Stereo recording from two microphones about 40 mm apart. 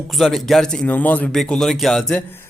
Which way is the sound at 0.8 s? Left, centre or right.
Left.